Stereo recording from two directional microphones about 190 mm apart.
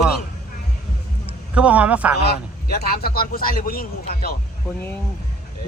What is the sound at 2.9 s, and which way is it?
A man's voice, 55° left (ahead or behind).